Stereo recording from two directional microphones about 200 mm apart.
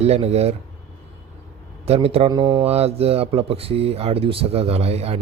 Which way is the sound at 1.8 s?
30° right (ahead or behind).